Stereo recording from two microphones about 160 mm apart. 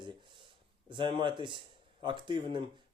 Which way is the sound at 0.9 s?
30° right (ahead or behind).